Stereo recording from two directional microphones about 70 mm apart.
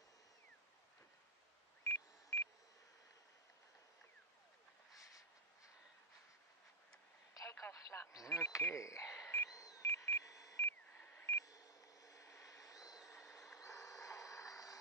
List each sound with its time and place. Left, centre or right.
1.9 s a sound: left
7.3 s telephone: left
7.6 s radio: left
8.1 s speech: left
8.6 s cash register: left
9.5 s a sound: left
10.6 s a sound: left
11.3 s beep: left
13.1 s vehicle: left